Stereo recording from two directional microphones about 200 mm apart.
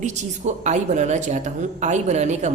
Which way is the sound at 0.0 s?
35° right (ahead or behind).